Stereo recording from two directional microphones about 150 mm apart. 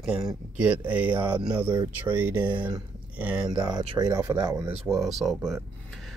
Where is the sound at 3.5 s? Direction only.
25° right (ahead or behind).